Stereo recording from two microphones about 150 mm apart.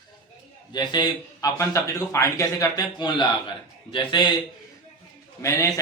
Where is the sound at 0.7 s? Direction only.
30° left (ahead or behind).